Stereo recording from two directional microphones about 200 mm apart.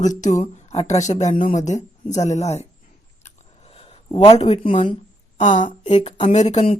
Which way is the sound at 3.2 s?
30° left (ahead or behind).